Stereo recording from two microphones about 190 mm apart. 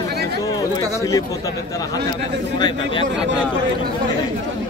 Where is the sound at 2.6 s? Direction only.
25° left (ahead or behind).